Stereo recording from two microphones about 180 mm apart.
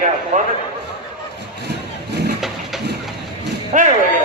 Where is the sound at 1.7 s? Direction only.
70° right (ahead or behind).